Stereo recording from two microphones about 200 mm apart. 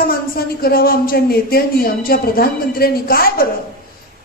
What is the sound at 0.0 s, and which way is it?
A man's voice, 50° left (ahead or behind).